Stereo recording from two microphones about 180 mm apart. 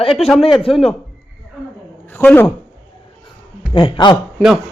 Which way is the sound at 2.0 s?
10° left (ahead or behind).